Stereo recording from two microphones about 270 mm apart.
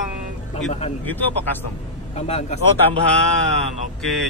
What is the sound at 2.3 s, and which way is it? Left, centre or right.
Speech, left.